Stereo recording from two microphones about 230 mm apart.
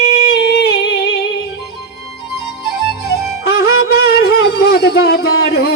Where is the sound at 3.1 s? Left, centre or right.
Left.